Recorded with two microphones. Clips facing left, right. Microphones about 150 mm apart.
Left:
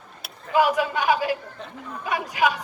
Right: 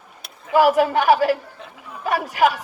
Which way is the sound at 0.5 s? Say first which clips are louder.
Right 5 dB; 50° right (ahead or behind).